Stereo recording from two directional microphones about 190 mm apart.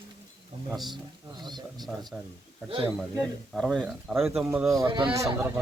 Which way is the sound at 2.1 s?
10° right (ahead or behind).